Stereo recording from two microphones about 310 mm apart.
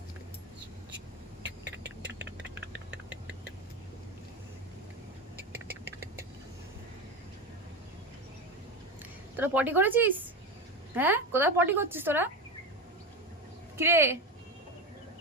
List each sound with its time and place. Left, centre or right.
2.6 s a sound: right
9.3 s a woman's voice: centre
13.7 s a woman's voice: centre